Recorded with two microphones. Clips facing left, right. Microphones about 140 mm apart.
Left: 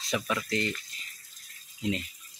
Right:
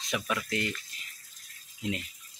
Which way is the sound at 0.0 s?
Centre (ahead or behind).